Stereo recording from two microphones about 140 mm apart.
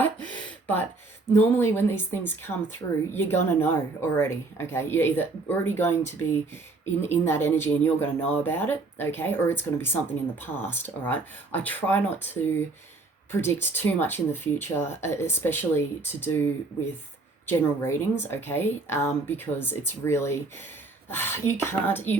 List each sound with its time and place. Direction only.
0.0 s a sound: 10° left (ahead or behind)
1.3 s speech: 15° left (ahead or behind)
17.4 s speech: 15° left (ahead or behind)